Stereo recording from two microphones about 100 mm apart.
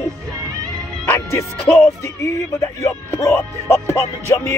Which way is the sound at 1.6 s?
15° left (ahead or behind).